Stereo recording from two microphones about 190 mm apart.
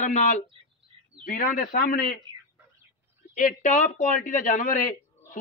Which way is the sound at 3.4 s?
40° left (ahead or behind).